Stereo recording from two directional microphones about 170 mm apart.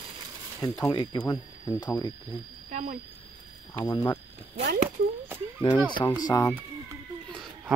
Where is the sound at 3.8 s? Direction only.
20° left (ahead or behind).